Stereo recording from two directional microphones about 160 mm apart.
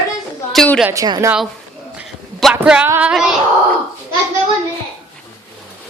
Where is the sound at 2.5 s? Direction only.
10° right (ahead or behind).